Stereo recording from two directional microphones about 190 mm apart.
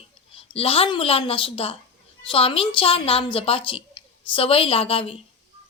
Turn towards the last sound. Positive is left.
turn(degrees=30)  # may be behind; listen again after turning